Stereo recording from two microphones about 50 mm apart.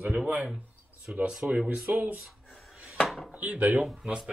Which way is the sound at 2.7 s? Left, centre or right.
Right.